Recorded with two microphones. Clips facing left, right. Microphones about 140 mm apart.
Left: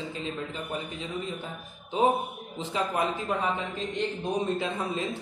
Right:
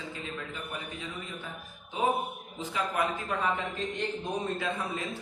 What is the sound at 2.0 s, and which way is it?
Speech, 25° left (ahead or behind).